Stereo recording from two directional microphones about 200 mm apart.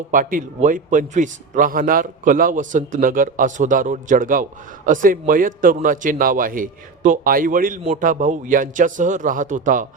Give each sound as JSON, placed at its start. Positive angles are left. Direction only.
{"t": 0.1, "sound": "a man's voice", "side_deg": -40}